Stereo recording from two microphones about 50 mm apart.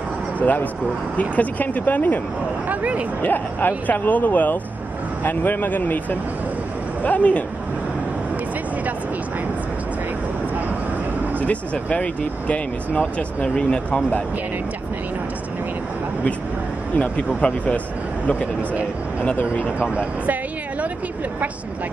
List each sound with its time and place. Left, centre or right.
0.4 s speech: left
2.7 s speech: right
3.2 s speech: left
11.4 s speech: left
13.6 s speech: centre
16.9 s speech: left
19.6 s speech: right